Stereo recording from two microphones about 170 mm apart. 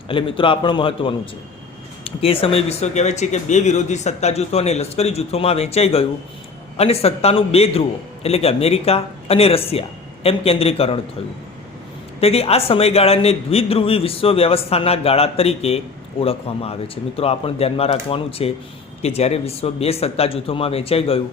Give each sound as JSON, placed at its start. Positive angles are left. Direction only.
{"t": 0.1, "sound": "speech", "side_deg": 30}
{"t": 12.2, "sound": "speech", "side_deg": 35}